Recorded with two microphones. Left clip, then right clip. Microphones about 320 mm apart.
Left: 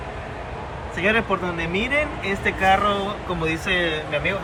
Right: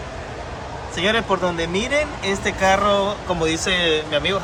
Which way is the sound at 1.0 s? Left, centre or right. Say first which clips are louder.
Right 1 dB; centre.